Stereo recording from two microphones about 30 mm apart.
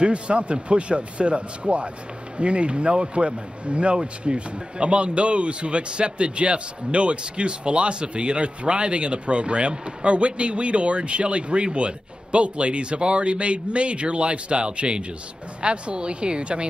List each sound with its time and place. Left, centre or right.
0.0 s speech: right